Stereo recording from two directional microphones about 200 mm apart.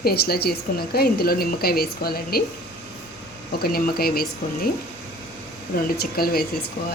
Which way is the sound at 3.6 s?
50° left (ahead or behind).